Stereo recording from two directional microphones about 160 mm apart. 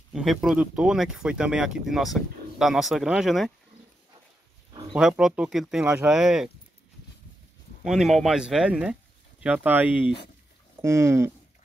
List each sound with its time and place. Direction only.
0.1 s speech: centre (ahead or behind)
4.9 s speech: 5° right (ahead or behind)
7.8 s speech: centre (ahead or behind)